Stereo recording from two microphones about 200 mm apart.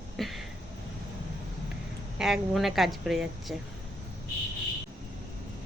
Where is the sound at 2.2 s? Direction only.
Centre (ahead or behind).